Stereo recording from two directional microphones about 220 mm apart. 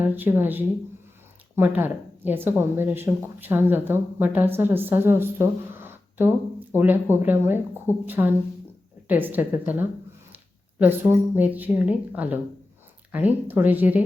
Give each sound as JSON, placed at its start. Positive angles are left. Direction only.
{"t": 0.0, "sound": "speech", "side_deg": -10}